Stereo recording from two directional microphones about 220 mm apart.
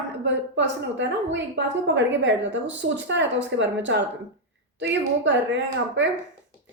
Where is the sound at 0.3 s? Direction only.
55° right (ahead or behind).